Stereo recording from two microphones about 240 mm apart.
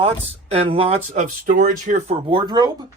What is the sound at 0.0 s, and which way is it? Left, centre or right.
Speech, right.